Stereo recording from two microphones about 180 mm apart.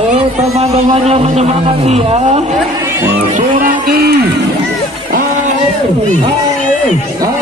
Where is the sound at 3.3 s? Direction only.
50° right (ahead or behind).